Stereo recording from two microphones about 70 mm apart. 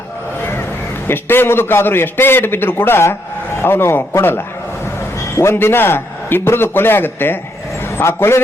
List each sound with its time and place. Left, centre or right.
1.0 s a man's voice: left